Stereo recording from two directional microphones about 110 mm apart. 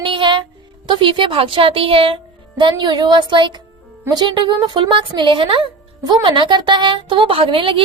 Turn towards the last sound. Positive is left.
turn(degrees=-55)  # may be behind; listen again after turning